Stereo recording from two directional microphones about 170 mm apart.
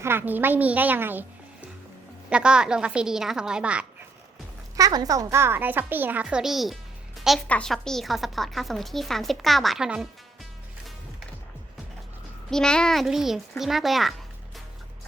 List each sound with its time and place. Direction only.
0.0 s a woman's voice: 15° right (ahead or behind)
2.3 s a woman's voice: 5° right (ahead or behind)
4.8 s a woman's voice: 20° right (ahead or behind); by 10.1 s 5° right (ahead or behind)
12.5 s a woman's voice: 5° left (ahead or behind)